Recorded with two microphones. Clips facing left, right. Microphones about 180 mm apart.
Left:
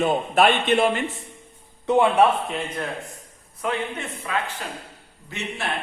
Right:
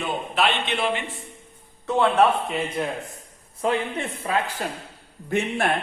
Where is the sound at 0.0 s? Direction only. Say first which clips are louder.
Left 5 dB; 50° left (ahead or behind).